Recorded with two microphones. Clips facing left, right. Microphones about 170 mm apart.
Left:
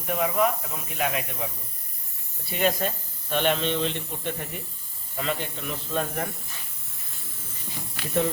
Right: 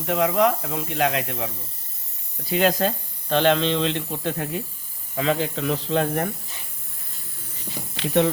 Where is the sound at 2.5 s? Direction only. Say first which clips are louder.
Right 5 dB; 90° right.